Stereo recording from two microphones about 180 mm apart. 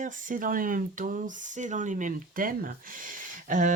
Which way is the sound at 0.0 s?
45° right (ahead or behind).